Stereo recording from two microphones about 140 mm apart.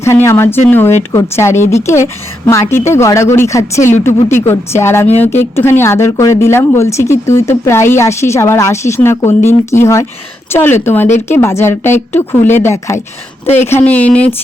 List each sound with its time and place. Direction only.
0.0 s a woman's voice: 20° left (ahead or behind)